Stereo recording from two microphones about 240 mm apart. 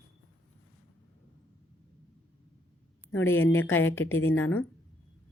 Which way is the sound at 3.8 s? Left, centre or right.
Centre.